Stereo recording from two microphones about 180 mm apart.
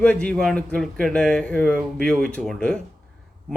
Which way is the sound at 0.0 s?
5° left (ahead or behind).